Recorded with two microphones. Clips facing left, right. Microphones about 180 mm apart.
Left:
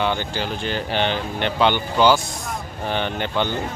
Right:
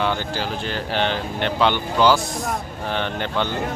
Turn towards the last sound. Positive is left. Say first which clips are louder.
# left 1 dB
turn(degrees=0)  # may be behind; listen again after turning